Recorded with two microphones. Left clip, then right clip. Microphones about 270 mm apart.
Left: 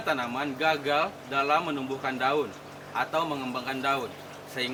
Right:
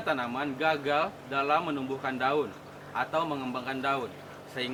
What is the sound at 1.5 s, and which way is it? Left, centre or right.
Speech, centre.